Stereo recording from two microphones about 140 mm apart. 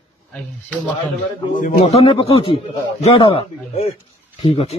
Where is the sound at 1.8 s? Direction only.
45° left (ahead or behind).